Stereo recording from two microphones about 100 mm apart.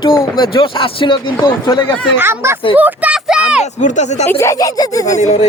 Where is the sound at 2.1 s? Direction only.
25° right (ahead or behind).